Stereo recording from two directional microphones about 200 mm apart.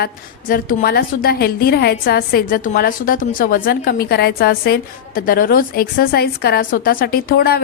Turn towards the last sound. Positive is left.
turn(degrees=50)  # may be behind; listen again after turning